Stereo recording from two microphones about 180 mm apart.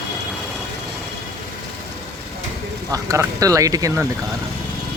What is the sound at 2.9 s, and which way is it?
Speech, 20° right (ahead or behind).